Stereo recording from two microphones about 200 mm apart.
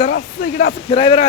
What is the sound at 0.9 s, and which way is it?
Speech, 25° left (ahead or behind).